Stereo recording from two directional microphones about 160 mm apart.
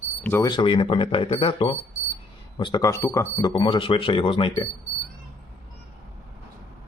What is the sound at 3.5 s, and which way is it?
Speech, 30° left (ahead or behind).